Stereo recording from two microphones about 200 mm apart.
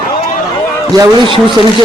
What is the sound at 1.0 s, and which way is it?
Speech, 25° right (ahead or behind).